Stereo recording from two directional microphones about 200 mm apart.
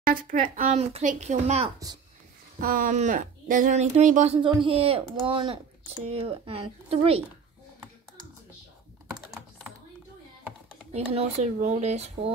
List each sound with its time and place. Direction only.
0.0 s speech: 45° right (ahead or behind)
2.6 s speech: 45° right (ahead or behind)
4.4 s speech: 25° right (ahead or behind)
10.9 s speech: 35° right (ahead or behind)